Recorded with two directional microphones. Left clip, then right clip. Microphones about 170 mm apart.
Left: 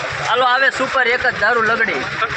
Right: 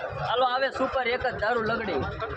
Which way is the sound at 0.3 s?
25° left (ahead or behind).